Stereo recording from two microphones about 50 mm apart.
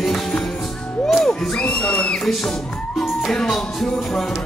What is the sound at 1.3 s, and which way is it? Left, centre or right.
Music, centre.